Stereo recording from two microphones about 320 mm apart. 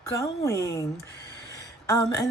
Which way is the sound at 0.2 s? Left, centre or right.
Centre.